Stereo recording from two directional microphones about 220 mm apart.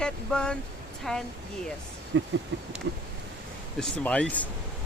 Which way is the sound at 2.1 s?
55° right (ahead or behind).